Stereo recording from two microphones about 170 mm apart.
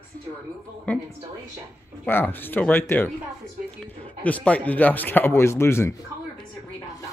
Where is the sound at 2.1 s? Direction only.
10° left (ahead or behind).